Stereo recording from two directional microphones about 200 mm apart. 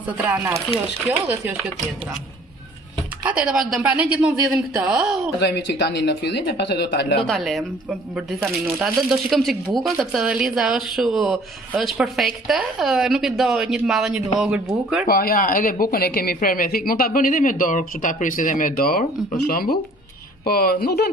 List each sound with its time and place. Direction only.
0.2 s speech: 10° right (ahead or behind)
3.3 s speech: 5° right (ahead or behind)
5.4 s speech: 55° left (ahead or behind)
7.2 s speech: centre (ahead or behind)
15.0 s speech: 45° left (ahead or behind)